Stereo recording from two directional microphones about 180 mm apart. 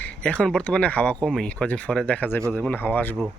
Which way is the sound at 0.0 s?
5° left (ahead or behind).